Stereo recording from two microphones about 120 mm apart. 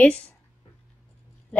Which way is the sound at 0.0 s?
10° left (ahead or behind).